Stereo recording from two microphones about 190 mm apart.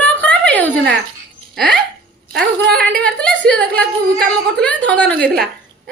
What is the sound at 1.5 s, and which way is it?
Speech, 5° left (ahead or behind).